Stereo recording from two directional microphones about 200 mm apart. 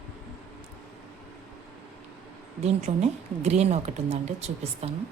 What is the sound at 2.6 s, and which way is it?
A woman's voice, 35° right (ahead or behind).